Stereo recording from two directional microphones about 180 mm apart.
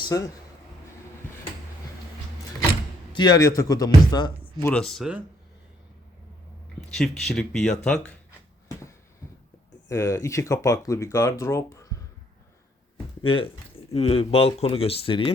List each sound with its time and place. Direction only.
0.0 s a man's voice: 20° left (ahead or behind)
3.1 s a man's voice: 25° left (ahead or behind)
4.7 s speech: centre (ahead or behind)
7.2 s speech: centre (ahead or behind)
9.9 s speech: 15° left (ahead or behind)
13.2 s a man's voice: 30° left (ahead or behind)